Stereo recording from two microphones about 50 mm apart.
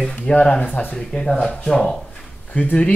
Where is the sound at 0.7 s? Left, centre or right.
Left.